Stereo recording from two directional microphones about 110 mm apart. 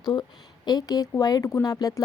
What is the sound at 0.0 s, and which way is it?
Speech, 40° left (ahead or behind).